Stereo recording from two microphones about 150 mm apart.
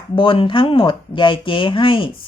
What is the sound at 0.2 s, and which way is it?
Speech, 35° left (ahead or behind).